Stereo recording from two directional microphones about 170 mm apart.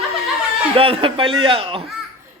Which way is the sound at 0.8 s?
30° right (ahead or behind).